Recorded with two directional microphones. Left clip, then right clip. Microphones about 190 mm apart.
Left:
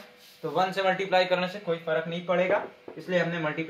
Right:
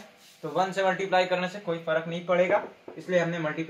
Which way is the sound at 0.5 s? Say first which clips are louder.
Even; 35° left (ahead or behind).